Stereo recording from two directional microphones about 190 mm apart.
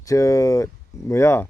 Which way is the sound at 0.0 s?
15° left (ahead or behind).